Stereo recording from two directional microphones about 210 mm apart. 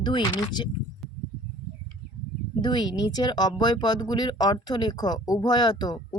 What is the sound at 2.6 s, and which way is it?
Speech, 20° left (ahead or behind).